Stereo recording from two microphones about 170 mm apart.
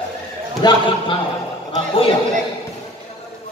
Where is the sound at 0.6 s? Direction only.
25° left (ahead or behind).